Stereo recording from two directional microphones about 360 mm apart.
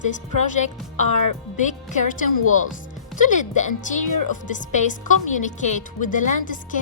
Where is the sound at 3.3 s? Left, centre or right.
Centre.